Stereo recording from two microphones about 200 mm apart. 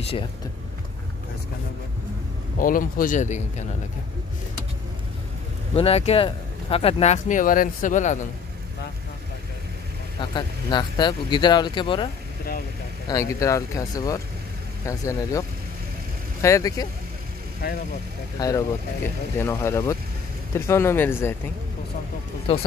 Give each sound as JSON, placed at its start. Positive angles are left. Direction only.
{"t": 2.6, "sound": "speech", "side_deg": 45}
{"t": 5.8, "sound": "speech", "side_deg": 30}
{"t": 10.3, "sound": "speech", "side_deg": 20}
{"t": 13.1, "sound": "speech", "side_deg": 15}
{"t": 17.6, "sound": "speech", "side_deg": 50}
{"t": 18.4, "sound": "speech", "side_deg": 15}